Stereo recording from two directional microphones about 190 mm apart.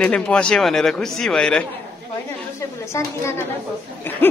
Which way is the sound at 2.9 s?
15° left (ahead or behind).